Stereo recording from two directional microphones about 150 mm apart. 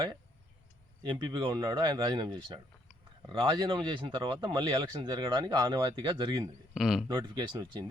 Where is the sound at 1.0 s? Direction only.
30° right (ahead or behind).